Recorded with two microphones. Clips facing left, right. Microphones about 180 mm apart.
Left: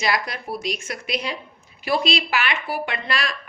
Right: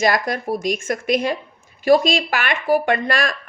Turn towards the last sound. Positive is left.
turn(degrees=-50)  # may be behind; listen again after turning